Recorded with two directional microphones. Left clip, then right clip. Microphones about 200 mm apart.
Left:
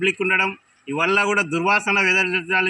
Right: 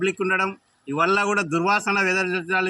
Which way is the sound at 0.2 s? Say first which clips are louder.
Left 3 dB; 15° right (ahead or behind).